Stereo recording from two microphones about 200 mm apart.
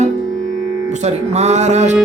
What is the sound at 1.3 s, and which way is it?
Music, 35° right (ahead or behind).